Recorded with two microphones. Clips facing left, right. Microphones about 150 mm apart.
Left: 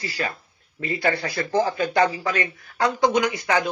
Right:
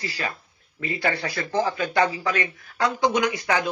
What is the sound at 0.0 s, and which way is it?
A man's voice, 40° left (ahead or behind).